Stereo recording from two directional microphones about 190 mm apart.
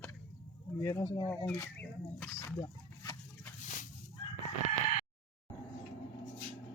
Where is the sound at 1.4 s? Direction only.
10° left (ahead or behind).